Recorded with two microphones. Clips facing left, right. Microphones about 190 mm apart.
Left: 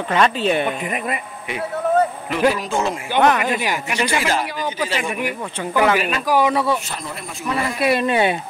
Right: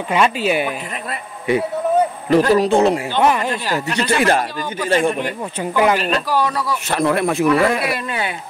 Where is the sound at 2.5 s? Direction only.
35° right (ahead or behind).